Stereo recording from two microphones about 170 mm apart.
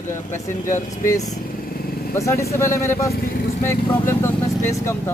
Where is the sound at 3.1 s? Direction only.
60° left (ahead or behind).